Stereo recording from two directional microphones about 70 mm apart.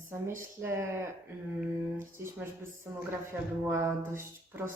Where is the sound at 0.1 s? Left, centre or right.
Right.